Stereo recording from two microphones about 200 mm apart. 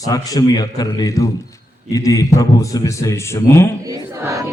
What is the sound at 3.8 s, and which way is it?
Speech, 15° right (ahead or behind).